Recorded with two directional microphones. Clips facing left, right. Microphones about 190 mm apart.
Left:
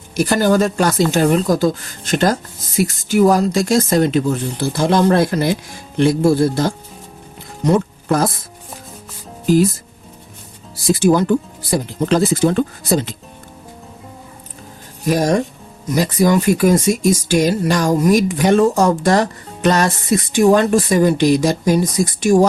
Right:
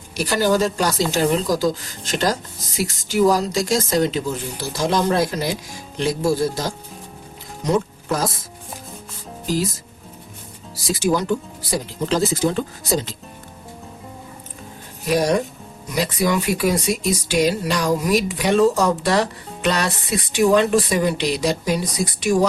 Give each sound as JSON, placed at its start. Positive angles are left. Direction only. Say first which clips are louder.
{"t": 0.2, "sound": "speech", "louder": "left 4 dB", "side_deg": 50}
{"t": 7.6, "sound": "music", "louder": "left 4 dB", "side_deg": 55}
{"t": 10.8, "sound": "speech", "louder": "left 6 dB", "side_deg": 55}
{"t": 15.0, "sound": "speech", "louder": "left 3 dB", "side_deg": 45}